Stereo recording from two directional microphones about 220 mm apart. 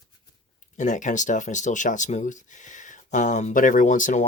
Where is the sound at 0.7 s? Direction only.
35° left (ahead or behind).